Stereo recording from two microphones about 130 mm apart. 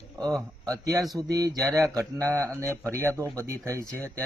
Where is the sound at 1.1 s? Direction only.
30° right (ahead or behind).